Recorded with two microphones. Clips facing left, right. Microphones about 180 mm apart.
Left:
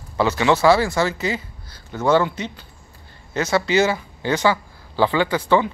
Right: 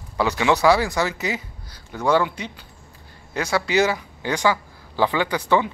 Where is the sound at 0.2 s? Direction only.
15° right (ahead or behind).